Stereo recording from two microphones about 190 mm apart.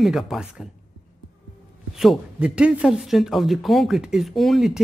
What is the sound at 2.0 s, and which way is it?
Speech, 5° right (ahead or behind).